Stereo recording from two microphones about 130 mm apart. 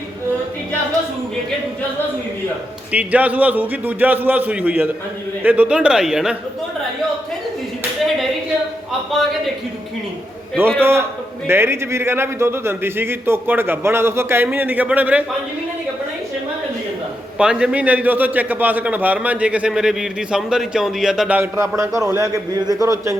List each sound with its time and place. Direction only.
2.9 s a man's voice: 10° right (ahead or behind)
10.8 s a man's voice: 20° right (ahead or behind)
17.3 s a man's voice: 5° right (ahead or behind)
21.8 s a man's voice: 25° right (ahead or behind)